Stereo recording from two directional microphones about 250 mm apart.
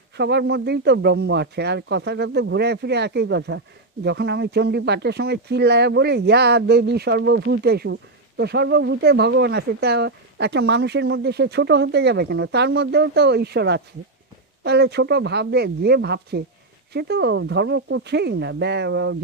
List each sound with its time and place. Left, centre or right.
0.2 s speech: right